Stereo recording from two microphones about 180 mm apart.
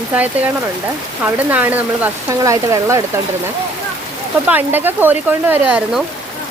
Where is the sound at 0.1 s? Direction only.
10° right (ahead or behind).